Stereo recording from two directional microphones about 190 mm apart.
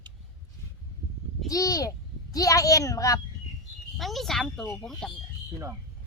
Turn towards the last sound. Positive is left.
turn(degrees=0)  # may be behind; listen again after turning